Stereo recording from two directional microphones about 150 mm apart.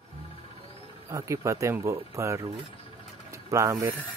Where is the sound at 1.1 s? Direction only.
20° right (ahead or behind).